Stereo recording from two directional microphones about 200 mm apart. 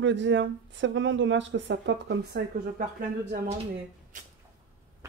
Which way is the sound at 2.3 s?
50° right (ahead or behind).